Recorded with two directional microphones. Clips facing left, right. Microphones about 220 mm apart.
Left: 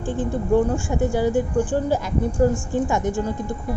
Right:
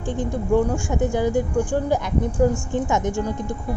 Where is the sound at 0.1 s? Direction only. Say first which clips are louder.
Left 1 dB; 15° right (ahead or behind).